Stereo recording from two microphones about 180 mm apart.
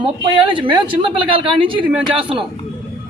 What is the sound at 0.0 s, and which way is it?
Speech, 30° right (ahead or behind).